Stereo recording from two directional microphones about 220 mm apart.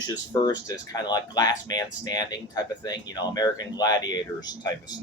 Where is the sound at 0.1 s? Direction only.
15° left (ahead or behind).